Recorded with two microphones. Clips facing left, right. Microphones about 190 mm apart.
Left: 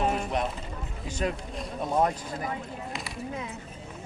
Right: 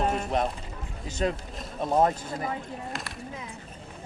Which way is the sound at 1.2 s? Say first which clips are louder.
Right 2 dB; 30° right (ahead or behind).